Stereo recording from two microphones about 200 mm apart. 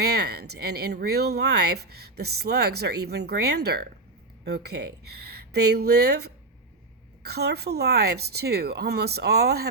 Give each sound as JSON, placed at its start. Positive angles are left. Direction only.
{"t": 0.0, "sound": "speech", "side_deg": -55}